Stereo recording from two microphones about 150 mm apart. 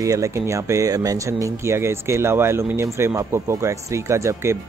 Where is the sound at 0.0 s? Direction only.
20° right (ahead or behind).